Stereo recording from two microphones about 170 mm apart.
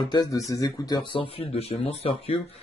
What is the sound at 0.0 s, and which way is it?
Speech, 25° left (ahead or behind).